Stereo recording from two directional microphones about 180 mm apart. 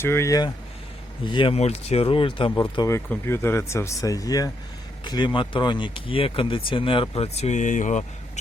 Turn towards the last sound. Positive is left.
turn(degrees=45)  # may be behind; listen again after turning